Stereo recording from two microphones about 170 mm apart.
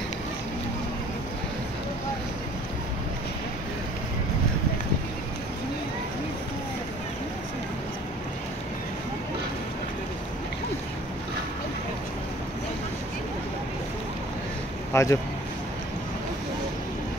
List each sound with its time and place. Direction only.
14.9 s speech: 15° left (ahead or behind)